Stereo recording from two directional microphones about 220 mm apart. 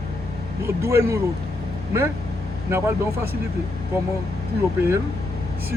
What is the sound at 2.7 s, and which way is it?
Speech, 10° right (ahead or behind).